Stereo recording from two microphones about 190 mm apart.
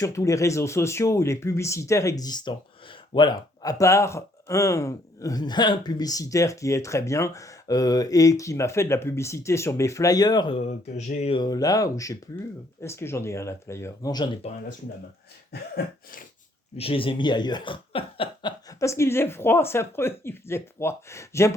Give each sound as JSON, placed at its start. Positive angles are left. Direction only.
{"t": 0.0, "sound": "speech", "side_deg": 15}
{"t": 11.3, "sound": "speech", "side_deg": 20}
{"t": 16.7, "sound": "speech", "side_deg": 30}